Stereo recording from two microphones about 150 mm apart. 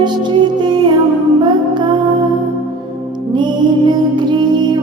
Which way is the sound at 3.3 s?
30° right (ahead or behind).